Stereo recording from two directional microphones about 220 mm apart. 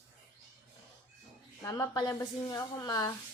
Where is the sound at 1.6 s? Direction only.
15° left (ahead or behind).